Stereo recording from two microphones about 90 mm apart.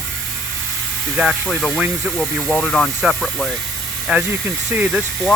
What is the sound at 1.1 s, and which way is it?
Speech, 5° right (ahead or behind).